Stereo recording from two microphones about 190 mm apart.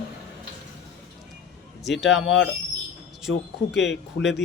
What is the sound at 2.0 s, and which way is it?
Speech, 75° left (ahead or behind).